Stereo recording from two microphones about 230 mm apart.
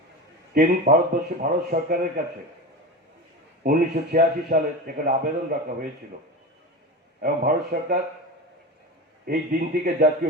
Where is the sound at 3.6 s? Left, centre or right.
Right.